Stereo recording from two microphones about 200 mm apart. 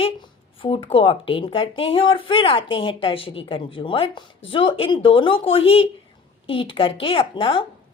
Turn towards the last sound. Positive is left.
turn(degrees=25)  # may be behind; listen again after turning